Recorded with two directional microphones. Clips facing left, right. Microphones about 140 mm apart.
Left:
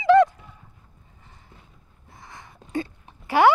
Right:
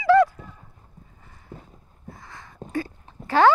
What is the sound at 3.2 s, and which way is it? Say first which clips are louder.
Clip-clop: even; 10° left (ahead or behind).